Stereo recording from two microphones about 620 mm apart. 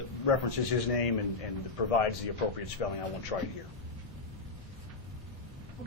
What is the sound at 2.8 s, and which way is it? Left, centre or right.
Speech, left.